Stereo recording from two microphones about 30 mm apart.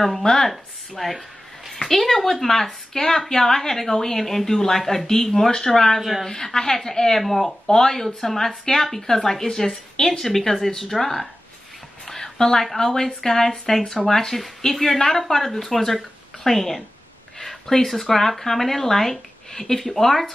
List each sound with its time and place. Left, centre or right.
0.2 s speech: centre
0.5 s speech: centre
7.2 s speech: centre
7.6 s speech: centre
12.1 s a sound: centre
12.7 s speech: centre
17.4 s a sound: centre
18.4 s speech: centre